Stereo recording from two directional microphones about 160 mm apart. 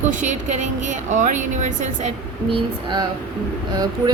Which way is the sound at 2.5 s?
30° right (ahead or behind).